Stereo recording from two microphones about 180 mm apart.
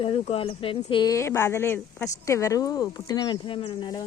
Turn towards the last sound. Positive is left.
turn(degrees=25)  # may be behind; listen again after turning